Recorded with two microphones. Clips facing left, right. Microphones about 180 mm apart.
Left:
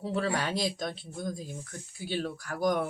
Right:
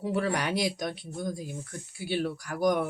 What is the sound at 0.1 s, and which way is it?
Speech, 15° right (ahead or behind).